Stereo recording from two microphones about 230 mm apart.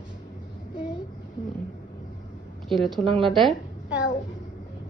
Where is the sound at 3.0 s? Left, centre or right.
Right.